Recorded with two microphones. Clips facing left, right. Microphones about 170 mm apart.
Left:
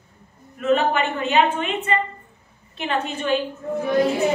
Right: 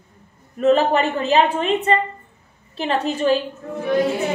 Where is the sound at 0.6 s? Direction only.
35° right (ahead or behind).